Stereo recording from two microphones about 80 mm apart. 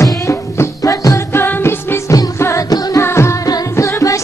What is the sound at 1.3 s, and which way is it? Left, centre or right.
Music, left.